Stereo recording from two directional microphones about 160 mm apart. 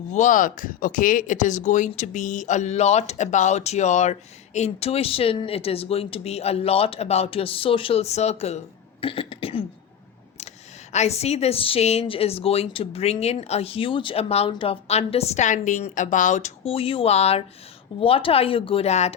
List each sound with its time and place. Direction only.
0.1 s speech: 50° left (ahead or behind); by 9.6 s 35° left (ahead or behind)
10.9 s a woman's voice: 40° left (ahead or behind)